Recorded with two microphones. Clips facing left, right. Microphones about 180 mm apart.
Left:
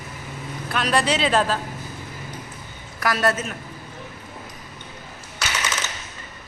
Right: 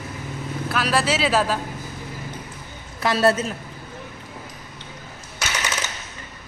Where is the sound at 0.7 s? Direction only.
5° right (ahead or behind).